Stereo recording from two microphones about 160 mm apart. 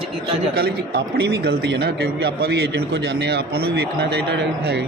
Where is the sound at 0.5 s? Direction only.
75° right (ahead or behind); by 4.8 s 90° right.